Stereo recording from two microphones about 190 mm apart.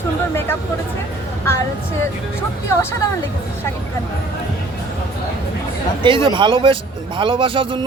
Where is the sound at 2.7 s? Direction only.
15° left (ahead or behind).